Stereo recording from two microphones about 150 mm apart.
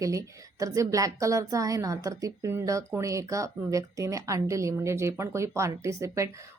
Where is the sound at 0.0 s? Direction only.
20° right (ahead or behind).